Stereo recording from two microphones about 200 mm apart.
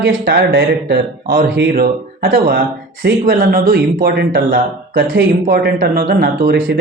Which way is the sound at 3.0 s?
50° right (ahead or behind).